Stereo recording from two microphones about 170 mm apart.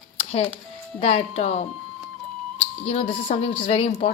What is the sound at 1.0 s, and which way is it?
Speech, 40° left (ahead or behind).